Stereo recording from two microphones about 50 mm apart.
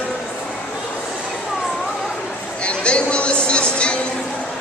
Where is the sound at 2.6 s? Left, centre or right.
Left.